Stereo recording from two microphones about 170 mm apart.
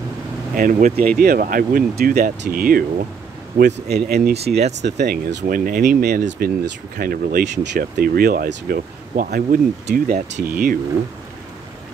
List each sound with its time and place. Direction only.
0.6 s speech: 55° right (ahead or behind)
3.5 s speech: 75° right (ahead or behind); by 6.0 s 55° right (ahead or behind)
6.0 s speech: 65° right (ahead or behind)